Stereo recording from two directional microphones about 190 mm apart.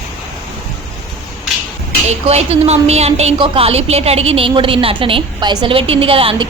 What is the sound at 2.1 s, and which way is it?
A woman's voice, 35° right (ahead or behind).